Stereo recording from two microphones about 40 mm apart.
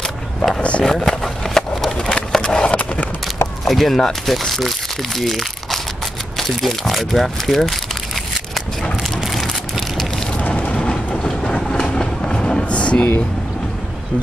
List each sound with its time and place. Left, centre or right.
0.6 s vehicle: left
0.8 s skateboard: centre
3.6 s speech: centre
10.4 s a sound: left
11.2 s train: centre
11.8 s a sound: centre